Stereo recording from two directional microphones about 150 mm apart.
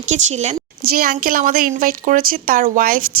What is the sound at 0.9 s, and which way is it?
A woman's voice, 75° right (ahead or behind).